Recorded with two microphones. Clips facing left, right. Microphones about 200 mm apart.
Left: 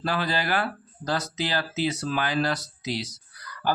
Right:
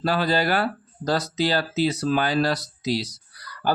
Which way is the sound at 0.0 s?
40° right (ahead or behind).